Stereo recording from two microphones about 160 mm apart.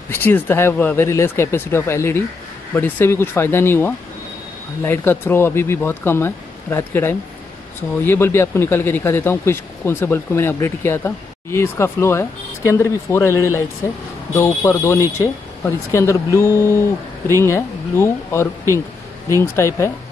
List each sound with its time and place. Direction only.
0.1 s speech: 15° left (ahead or behind)